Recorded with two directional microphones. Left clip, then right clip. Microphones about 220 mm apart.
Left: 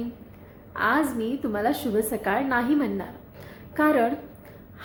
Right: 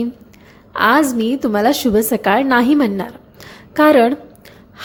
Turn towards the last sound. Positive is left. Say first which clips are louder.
# right 11 dB
turn(degrees=-45)  # may be behind; listen again after turning